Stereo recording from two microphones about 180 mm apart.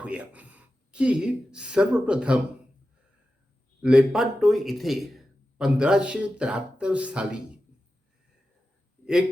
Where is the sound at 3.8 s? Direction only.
5° right (ahead or behind).